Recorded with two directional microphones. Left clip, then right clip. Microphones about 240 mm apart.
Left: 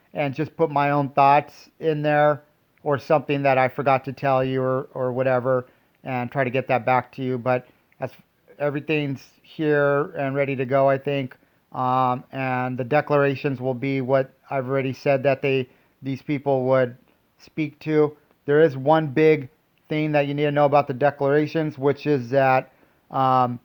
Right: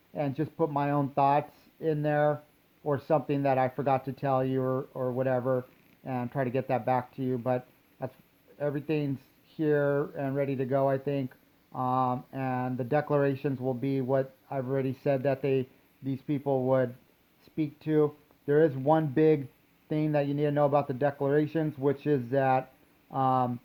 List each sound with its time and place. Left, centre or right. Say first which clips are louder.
0.1 s speech: left 7 dB; left